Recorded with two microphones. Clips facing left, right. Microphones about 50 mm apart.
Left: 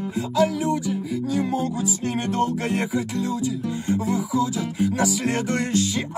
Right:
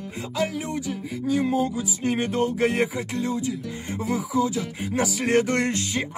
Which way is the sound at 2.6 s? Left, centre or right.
Right.